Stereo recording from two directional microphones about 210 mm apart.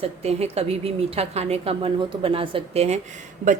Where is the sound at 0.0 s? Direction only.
30° right (ahead or behind).